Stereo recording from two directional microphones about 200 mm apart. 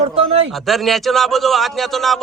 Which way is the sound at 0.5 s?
Centre (ahead or behind).